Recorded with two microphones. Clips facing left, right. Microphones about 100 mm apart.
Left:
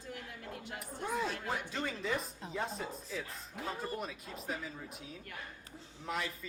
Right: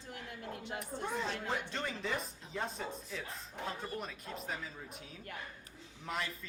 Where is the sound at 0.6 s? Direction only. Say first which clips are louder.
Right 3 dB; 25° right (ahead or behind).